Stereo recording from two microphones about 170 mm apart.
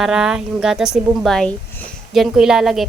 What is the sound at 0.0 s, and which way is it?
Speech, 5° right (ahead or behind).